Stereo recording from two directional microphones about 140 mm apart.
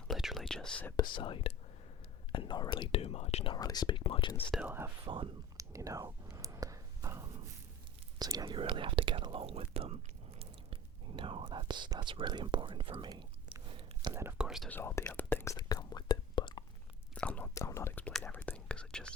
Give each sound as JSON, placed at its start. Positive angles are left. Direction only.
{"t": 0.1, "sound": "whispering", "side_deg": 0}
{"t": 0.9, "sound": "speech", "side_deg": 35}
{"t": 3.5, "sound": "speech", "side_deg": 30}
{"t": 5.0, "sound": "speech", "side_deg": -35}
{"t": 5.5, "sound": "whispering", "side_deg": -25}
{"t": 8.2, "sound": "speech", "side_deg": -25}
{"t": 14.1, "sound": "speech", "side_deg": -20}
{"t": 14.3, "sound": "speech", "side_deg": -5}
{"t": 14.7, "sound": "speech", "side_deg": 15}
{"t": 15.5, "sound": "whispering", "side_deg": 30}
{"t": 17.2, "sound": "speech", "side_deg": 10}
{"t": 17.5, "sound": "speech", "side_deg": 20}